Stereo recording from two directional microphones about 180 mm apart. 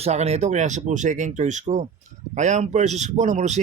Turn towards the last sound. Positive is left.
turn(degrees=-40)  # may be behind; listen again after turning